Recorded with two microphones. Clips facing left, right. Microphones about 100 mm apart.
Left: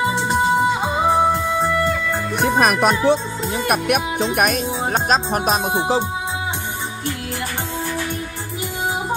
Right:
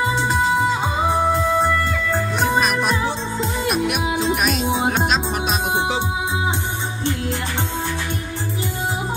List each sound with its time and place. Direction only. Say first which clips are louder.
2.4 s music: left 5 dB; 60° left (ahead or behind)
3.6 s speech: left 3 dB; 55° left (ahead or behind)